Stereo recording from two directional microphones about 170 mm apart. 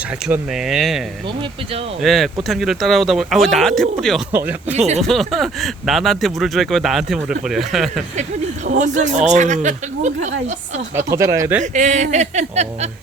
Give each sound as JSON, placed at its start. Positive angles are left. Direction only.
{"t": 0.3, "sound": "speech", "side_deg": -5}
{"t": 4.3, "sound": "speech", "side_deg": -10}
{"t": 4.7, "sound": "speech", "side_deg": -40}
{"t": 5.0, "sound": "speech", "side_deg": 0}
{"t": 8.6, "sound": "speech", "side_deg": -45}
{"t": 10.9, "sound": "speech", "side_deg": -15}
{"t": 11.6, "sound": "speech", "side_deg": -45}